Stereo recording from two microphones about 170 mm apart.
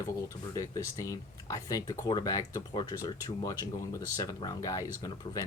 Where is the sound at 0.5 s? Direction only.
20° left (ahead or behind).